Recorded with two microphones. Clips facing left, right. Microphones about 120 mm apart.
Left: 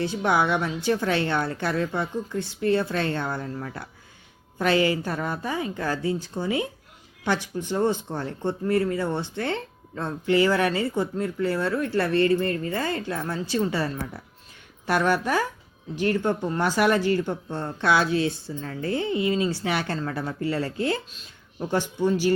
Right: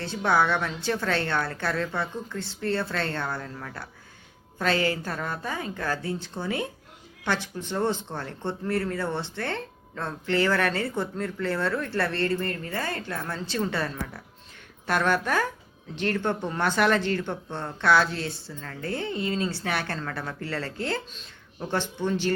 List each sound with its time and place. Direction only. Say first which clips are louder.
0.0 s a woman's voice: left 1 dB; 15° left (ahead or behind)